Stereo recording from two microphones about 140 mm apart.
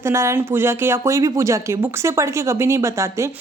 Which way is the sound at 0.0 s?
20° right (ahead or behind).